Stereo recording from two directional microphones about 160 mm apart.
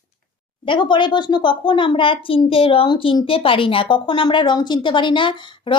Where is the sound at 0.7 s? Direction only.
30° left (ahead or behind).